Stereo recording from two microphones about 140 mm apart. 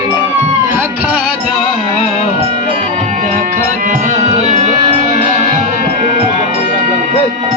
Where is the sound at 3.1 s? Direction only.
65° right (ahead or behind).